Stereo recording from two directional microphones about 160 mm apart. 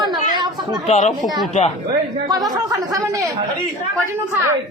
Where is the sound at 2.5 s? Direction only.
20° right (ahead or behind).